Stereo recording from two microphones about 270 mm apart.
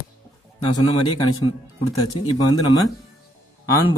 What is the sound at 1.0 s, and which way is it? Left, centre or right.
A man's voice, centre.